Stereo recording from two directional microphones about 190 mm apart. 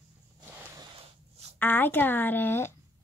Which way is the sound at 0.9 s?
30° right (ahead or behind).